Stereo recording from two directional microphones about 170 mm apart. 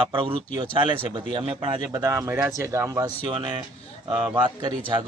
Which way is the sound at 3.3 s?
30° right (ahead or behind).